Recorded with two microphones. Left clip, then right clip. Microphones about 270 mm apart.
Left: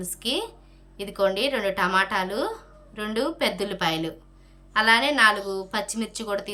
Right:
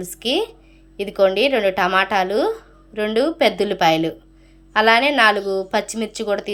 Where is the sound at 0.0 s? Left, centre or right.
Centre.